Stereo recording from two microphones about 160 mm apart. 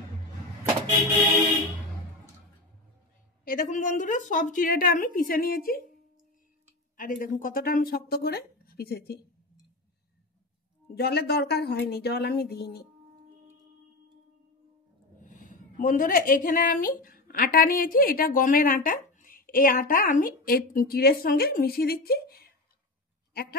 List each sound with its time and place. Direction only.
3.4 s a woman's voice: 55° left (ahead or behind)
7.0 s speech: 55° left (ahead or behind); by 9.2 s 85° left
11.0 s a woman's voice: 90° left
15.1 s a woman's voice: 55° left (ahead or behind); by 23.6 s 75° left (ahead or behind)